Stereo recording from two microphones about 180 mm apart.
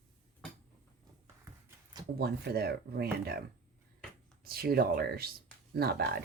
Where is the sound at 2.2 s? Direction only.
60° right (ahead or behind).